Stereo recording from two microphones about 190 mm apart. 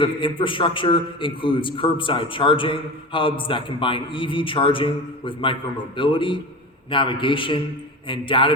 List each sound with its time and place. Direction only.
0.0 s a man's voice: 25° left (ahead or behind)